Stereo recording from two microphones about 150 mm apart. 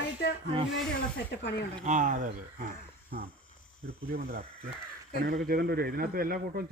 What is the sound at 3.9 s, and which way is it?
Speech, 85° right.